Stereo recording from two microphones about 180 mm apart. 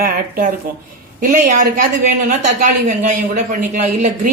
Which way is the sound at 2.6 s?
45° right (ahead or behind).